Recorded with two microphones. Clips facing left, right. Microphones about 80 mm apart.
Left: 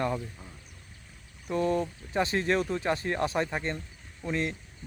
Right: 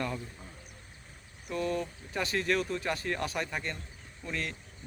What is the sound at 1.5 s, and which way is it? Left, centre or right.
Speech, left.